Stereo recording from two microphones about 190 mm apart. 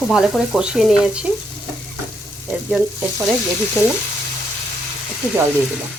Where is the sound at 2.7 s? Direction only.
Centre (ahead or behind).